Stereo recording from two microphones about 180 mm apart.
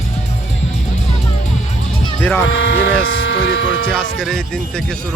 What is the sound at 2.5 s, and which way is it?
Speech, 90° left.